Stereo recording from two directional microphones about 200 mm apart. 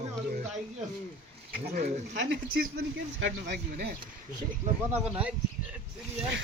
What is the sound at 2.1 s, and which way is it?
A man's voice, 65° right (ahead or behind).